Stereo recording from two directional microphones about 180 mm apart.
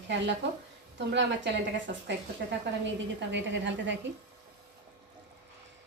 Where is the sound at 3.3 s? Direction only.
85° right.